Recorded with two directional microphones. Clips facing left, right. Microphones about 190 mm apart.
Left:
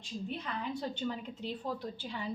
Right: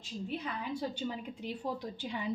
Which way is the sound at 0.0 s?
5° right (ahead or behind).